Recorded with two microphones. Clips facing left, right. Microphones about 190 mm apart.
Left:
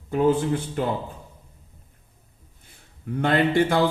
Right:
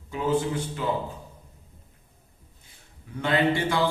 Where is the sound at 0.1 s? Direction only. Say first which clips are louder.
Left 5 dB; 55° left (ahead or behind).